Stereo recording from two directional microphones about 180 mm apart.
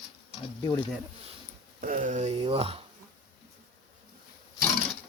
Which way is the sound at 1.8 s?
45° right (ahead or behind).